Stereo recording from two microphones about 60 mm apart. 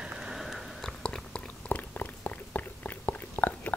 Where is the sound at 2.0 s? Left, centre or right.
Left.